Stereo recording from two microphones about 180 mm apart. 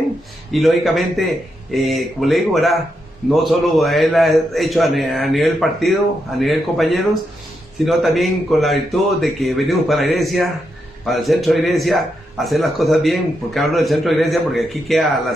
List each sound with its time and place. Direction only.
0.5 s a man's voice: centre (ahead or behind)